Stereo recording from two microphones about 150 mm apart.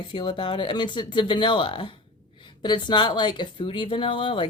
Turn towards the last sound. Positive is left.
turn(degrees=35)  # may be behind; listen again after turning